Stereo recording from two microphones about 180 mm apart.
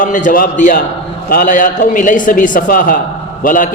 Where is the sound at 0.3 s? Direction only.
45° left (ahead or behind).